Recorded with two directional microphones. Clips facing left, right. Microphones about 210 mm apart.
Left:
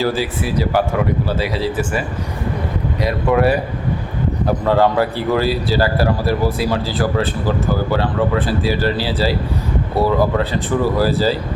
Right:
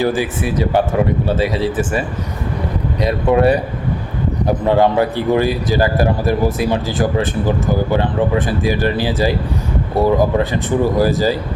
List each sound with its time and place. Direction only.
0.0 s speech: 15° right (ahead or behind)
3.0 s speech: 20° right (ahead or behind)
4.6 s a man's voice: 20° right (ahead or behind)